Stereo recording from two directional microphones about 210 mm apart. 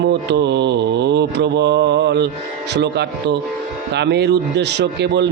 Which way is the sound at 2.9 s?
55° right (ahead or behind).